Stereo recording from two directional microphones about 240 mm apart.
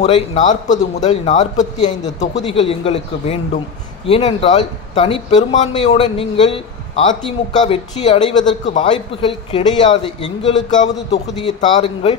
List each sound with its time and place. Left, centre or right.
0.0 s a man's voice: left